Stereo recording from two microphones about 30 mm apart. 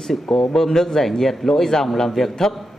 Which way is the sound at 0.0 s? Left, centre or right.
Centre.